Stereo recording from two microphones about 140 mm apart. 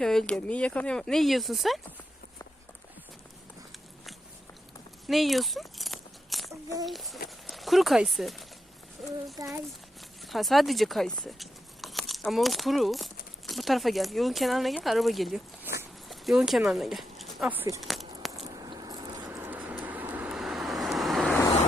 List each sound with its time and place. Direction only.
0.0 s speech: 5° left (ahead or behind)
5.0 s biting: centre (ahead or behind)
6.8 s speech: centre (ahead or behind)
9.3 s a child's voice: 25° right (ahead or behind)
10.2 s speech: centre (ahead or behind)
17.5 s speech: 15° right (ahead or behind)
17.7 s a sound: centre (ahead or behind)
18.5 s a sound: 30° right (ahead or behind)
19.4 s vehicle: 15° right (ahead or behind); by 21.4 s centre (ahead or behind)